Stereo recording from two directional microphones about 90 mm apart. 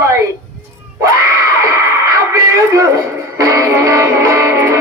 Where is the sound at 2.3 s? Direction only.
35° right (ahead or behind).